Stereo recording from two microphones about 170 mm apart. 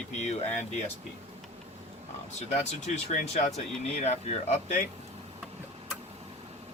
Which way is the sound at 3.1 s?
45° left (ahead or behind).